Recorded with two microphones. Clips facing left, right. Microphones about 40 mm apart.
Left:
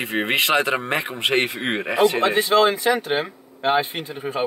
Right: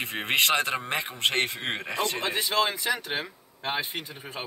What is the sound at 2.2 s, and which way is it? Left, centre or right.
Speech, left.